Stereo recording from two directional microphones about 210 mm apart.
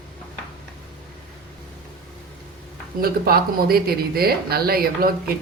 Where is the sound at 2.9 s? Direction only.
45° right (ahead or behind).